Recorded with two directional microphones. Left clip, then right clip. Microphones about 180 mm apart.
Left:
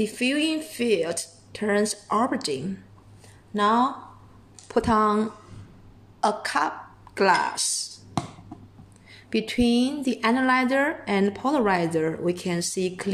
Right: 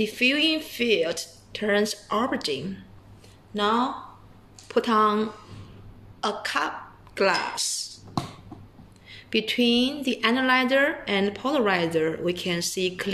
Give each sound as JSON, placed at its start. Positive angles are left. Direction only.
{"t": 0.0, "sound": "speech", "side_deg": 35}
{"t": 3.5, "sound": "a woman's voice", "side_deg": 45}
{"t": 9.1, "sound": "speech", "side_deg": 40}